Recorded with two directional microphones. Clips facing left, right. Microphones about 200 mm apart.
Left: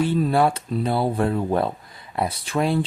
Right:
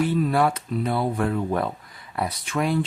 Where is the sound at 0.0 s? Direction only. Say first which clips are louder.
Left 2 dB; 30° left (ahead or behind).